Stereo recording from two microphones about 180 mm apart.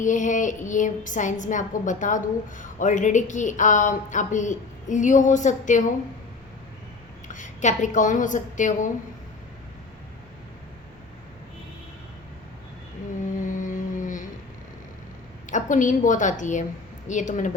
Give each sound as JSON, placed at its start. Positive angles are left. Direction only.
{"t": 0.0, "sound": "a woman's voice", "side_deg": 45}
{"t": 7.3, "sound": "a woman's voice", "side_deg": 45}
{"t": 13.5, "sound": "humming", "side_deg": 45}
{"t": 15.4, "sound": "a woman's voice", "side_deg": 45}